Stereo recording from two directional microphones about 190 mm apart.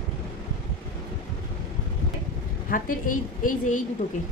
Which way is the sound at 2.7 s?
45° left (ahead or behind).